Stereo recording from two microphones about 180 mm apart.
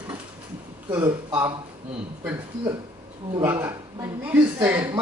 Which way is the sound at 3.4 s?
15° right (ahead or behind).